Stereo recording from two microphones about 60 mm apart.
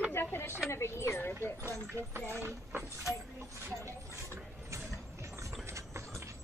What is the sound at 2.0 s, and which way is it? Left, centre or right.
Speech, right.